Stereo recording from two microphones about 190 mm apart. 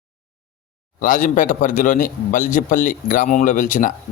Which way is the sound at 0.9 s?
45° left (ahead or behind).